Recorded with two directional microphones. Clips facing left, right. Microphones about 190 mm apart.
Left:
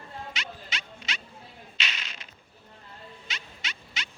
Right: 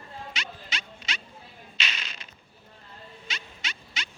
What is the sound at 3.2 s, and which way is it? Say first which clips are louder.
Music: right 3 dB; 40° right (ahead or behind).